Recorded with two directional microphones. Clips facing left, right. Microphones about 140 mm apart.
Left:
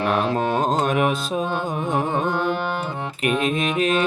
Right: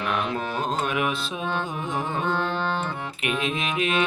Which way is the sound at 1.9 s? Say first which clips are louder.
Left 6 dB; 45° left (ahead or behind).